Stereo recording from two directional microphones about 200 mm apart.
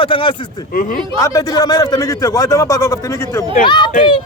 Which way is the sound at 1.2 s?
15° left (ahead or behind).